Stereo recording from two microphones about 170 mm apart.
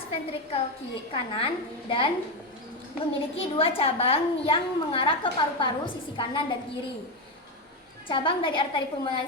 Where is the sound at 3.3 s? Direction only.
35° left (ahead or behind).